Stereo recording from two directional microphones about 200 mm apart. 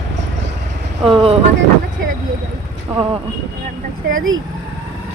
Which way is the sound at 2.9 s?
25° right (ahead or behind).